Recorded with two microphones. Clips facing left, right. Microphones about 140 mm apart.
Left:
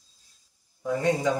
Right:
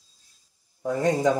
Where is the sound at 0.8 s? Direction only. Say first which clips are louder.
Right 2 dB; 40° right (ahead or behind).